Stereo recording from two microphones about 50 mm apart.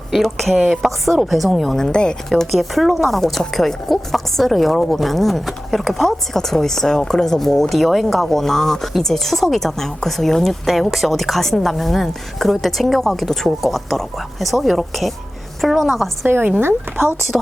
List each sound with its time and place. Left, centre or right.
0.1 s speech: centre
2.3 s speech: centre
16.2 s speech: right
16.6 s speech: right